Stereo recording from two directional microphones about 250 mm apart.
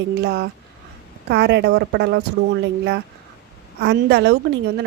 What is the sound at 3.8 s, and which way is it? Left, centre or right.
Speech, right.